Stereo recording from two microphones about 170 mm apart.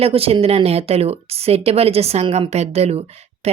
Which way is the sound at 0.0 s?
35° right (ahead or behind).